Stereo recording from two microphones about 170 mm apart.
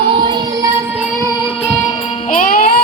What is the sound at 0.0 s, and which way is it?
Music, 30° right (ahead or behind).